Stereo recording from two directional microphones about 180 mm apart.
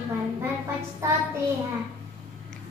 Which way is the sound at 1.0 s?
15° right (ahead or behind).